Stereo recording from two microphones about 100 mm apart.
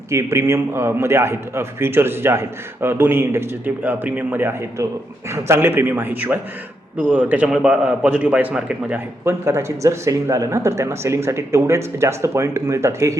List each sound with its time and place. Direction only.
0.1 s a man's voice: 30° right (ahead or behind)
4.8 s a man's voice: 35° right (ahead or behind); by 9.0 s 15° right (ahead or behind)
9.2 s a man's voice: 25° right (ahead or behind)